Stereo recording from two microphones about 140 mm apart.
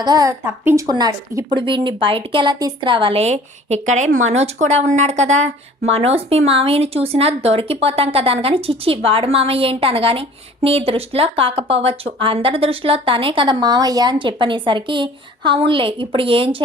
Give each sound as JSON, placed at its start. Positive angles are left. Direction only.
{"t": 0.0, "sound": "speech", "side_deg": -30}
{"t": 0.4, "sound": "speech", "side_deg": -15}
{"t": 0.9, "sound": "speech", "side_deg": -30}
{"t": 1.5, "sound": "speech", "side_deg": -35}